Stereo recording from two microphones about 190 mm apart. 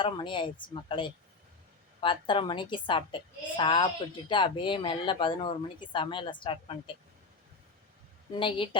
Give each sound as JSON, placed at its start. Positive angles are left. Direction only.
{"t": 0.0, "sound": "speech", "side_deg": 25}
{"t": 8.4, "sound": "speech", "side_deg": 25}